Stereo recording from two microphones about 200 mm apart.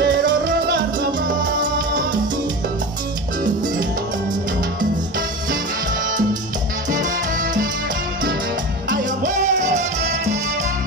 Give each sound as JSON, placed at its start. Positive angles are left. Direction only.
{"t": 0.0, "sound": "music", "side_deg": -45}
{"t": 6.9, "sound": "music", "side_deg": -40}
{"t": 8.8, "sound": "music", "side_deg": -40}